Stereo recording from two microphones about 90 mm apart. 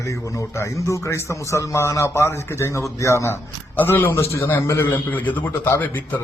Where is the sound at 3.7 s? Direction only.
20° left (ahead or behind).